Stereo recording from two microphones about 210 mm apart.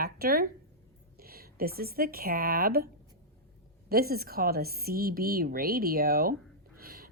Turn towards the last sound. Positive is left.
turn(degrees=-45)  # may be behind; listen again after turning